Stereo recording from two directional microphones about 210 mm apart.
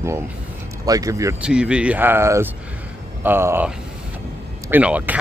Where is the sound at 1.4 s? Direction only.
5° right (ahead or behind).